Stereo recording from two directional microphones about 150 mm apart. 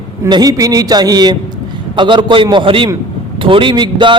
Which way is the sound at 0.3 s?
25° right (ahead or behind).